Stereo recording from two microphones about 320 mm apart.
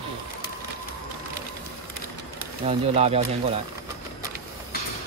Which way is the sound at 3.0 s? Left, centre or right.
Centre.